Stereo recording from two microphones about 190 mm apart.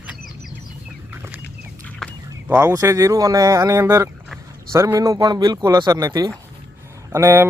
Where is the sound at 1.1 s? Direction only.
10° right (ahead or behind).